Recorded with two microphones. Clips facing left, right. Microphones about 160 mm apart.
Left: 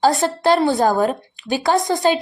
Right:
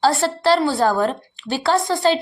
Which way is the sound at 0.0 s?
15° left (ahead or behind).